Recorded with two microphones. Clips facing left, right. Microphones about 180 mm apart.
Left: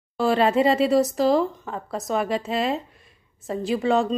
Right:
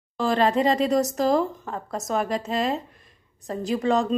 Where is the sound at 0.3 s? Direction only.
40° right (ahead or behind).